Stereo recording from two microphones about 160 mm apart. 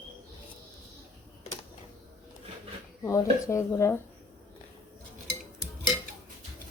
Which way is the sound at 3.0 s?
15° left (ahead or behind).